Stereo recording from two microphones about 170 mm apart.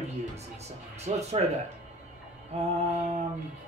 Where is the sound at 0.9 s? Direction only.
40° right (ahead or behind).